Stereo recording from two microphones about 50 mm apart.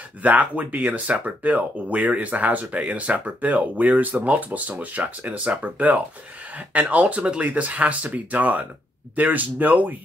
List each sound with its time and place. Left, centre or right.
0.2 s speech: right